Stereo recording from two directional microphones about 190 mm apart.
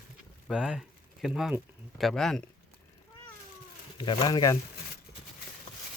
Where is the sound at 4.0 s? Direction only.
20° left (ahead or behind).